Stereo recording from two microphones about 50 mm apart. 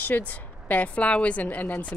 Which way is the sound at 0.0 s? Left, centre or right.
Left.